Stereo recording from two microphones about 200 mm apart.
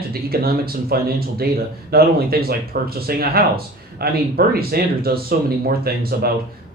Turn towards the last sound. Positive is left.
turn(degrees=-50)  # may be behind; listen again after turning